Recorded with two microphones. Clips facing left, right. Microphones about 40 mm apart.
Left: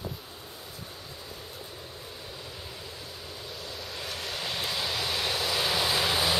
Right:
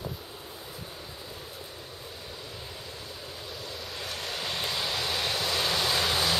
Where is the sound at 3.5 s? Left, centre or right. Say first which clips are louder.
Even; centre.